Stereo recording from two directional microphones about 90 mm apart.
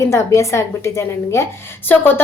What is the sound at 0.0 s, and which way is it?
A woman's voice, 35° left (ahead or behind).